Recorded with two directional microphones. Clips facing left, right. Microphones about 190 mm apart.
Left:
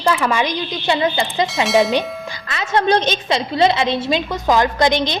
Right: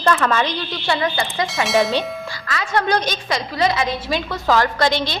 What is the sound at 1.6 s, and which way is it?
Speech, centre (ahead or behind).